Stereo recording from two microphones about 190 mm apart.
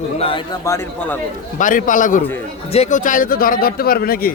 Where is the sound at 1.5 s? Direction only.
45° left (ahead or behind).